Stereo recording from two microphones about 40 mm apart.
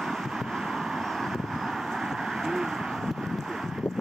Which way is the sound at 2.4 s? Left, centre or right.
Centre.